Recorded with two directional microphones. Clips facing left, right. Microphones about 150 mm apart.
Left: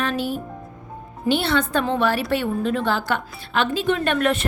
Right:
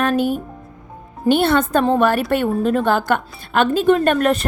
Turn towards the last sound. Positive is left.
turn(degrees=-40)  # may be behind; listen again after turning